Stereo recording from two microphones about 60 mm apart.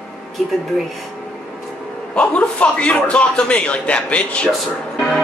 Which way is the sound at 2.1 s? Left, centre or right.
Centre.